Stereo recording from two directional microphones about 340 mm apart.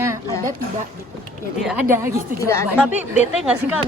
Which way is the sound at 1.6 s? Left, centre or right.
Centre.